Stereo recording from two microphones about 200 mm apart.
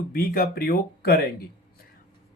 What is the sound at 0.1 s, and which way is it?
Speech, 45° left (ahead or behind).